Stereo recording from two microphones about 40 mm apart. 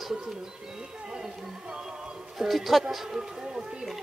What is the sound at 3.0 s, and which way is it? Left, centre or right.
Speech, centre.